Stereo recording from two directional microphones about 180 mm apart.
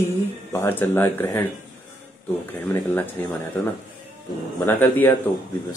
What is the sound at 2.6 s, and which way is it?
Speech, 10° left (ahead or behind).